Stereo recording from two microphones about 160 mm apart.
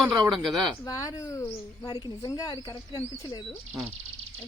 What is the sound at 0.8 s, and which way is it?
Speech, 20° left (ahead or behind).